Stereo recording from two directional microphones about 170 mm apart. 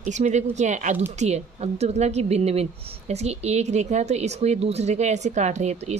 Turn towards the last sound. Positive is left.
turn(degrees=-40)  # may be behind; listen again after turning